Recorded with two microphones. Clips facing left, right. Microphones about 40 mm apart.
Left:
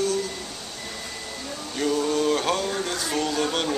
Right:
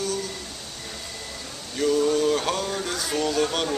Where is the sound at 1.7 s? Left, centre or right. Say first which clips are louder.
Right 2 dB; centre.